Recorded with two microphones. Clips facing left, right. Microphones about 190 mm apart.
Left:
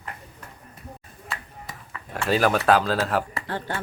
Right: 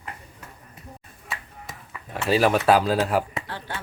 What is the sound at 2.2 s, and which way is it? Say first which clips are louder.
Speech: right 1 dB; 5° right (ahead or behind).